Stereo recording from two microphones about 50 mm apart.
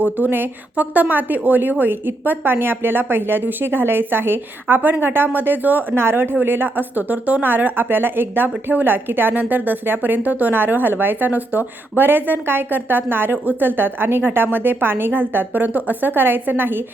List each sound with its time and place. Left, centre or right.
0.2 s a woman's voice: right
6.0 s a woman's voice: right
7.4 s a woman's voice: right
10.5 s a woman's voice: right